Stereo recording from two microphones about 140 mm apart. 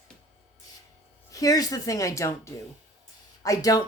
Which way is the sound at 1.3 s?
25° left (ahead or behind).